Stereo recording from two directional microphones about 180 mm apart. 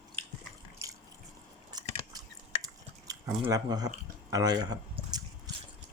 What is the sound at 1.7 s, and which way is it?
Biting, 20° right (ahead or behind).